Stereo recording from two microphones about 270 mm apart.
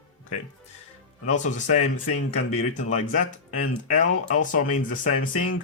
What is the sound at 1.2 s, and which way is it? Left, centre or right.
Speech, left.